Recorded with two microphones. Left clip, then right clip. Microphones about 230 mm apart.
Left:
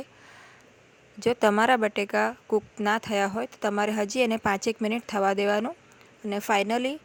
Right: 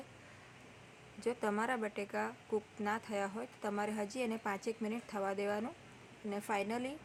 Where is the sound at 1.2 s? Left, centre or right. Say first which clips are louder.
Left 14 dB; left.